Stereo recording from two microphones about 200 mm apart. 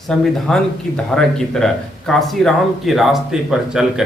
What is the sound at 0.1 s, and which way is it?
Speech, 5° left (ahead or behind).